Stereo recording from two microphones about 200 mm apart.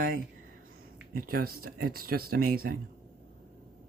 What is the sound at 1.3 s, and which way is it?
Speech, 50° right (ahead or behind).